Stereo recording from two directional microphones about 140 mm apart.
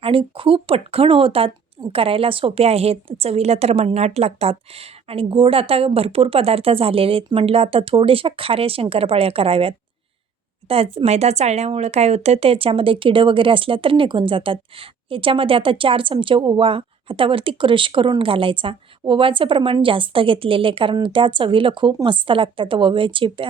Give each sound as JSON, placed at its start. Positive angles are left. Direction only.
{"t": 0.0, "sound": "a woman's voice", "side_deg": -40}